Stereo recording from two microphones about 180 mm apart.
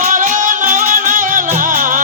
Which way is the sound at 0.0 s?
45° right (ahead or behind).